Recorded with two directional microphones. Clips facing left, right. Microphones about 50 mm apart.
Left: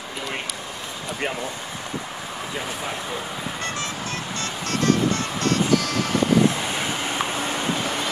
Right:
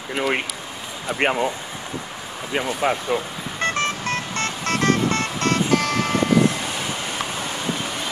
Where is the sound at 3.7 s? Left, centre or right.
Right.